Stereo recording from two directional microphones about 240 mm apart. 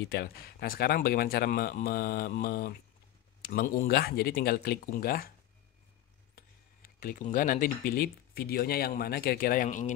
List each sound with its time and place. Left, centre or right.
0.0 s speech: left
6.3 s speech: left